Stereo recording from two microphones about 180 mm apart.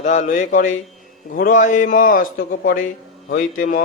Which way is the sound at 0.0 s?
45° left (ahead or behind).